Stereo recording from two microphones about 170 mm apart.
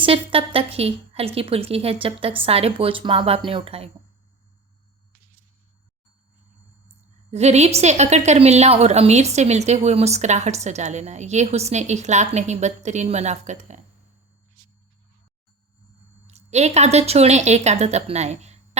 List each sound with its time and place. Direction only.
0.0 s a woman's voice: 35° right (ahead or behind)
7.3 s a woman's voice: 40° right (ahead or behind)
16.2 s speech: 40° right (ahead or behind)